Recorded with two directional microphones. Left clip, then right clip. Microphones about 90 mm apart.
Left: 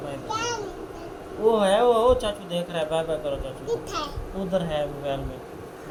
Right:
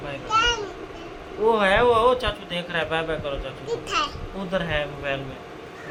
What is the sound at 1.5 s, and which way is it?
Speech, 30° right (ahead or behind).